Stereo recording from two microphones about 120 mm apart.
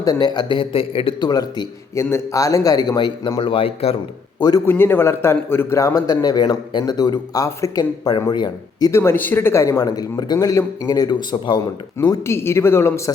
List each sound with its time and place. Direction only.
0.0 s speech: 35° left (ahead or behind)
1.3 s speech: 30° left (ahead or behind); by 3.9 s 55° left (ahead or behind)
4.4 s a man's voice: 35° left (ahead or behind)
4.6 s a man's voice: 20° left (ahead or behind); by 8.9 s 35° left (ahead or behind)
8.9 s a man's voice: 20° left (ahead or behind); by 11.6 s 35° left (ahead or behind)
12.2 s a man's voice: 20° left (ahead or behind)